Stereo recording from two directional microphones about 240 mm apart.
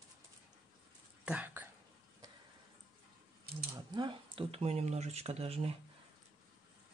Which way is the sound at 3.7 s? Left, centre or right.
Centre.